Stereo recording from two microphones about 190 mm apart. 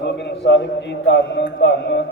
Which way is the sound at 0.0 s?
70° left (ahead or behind).